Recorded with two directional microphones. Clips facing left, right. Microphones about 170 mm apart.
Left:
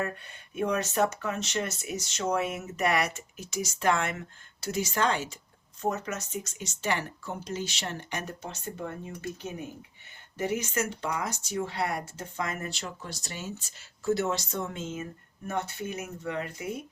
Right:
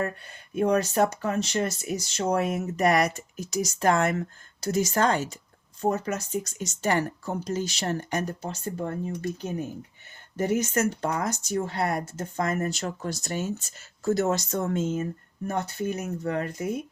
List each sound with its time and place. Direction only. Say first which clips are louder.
0.5 s speech: right 5 dB; 35° right (ahead or behind)
5.8 s speech: right 5 dB; 30° right (ahead or behind)